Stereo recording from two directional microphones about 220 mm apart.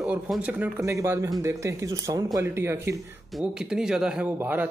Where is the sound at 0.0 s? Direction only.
5° right (ahead or behind).